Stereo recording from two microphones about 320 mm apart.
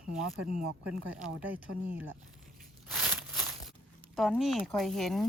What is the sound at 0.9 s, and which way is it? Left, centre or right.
Speech, centre.